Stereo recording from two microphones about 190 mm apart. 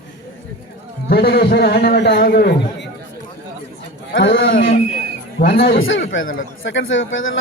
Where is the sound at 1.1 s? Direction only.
55° left (ahead or behind).